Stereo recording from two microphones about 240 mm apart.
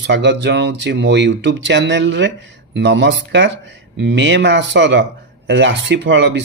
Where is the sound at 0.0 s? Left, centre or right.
Right.